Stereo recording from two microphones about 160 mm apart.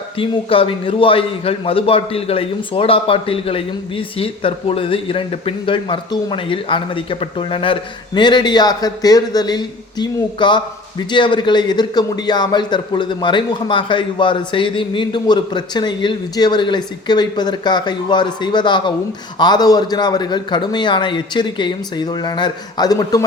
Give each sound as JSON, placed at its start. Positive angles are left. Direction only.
{"t": 0.2, "sound": "a man's voice", "side_deg": 35}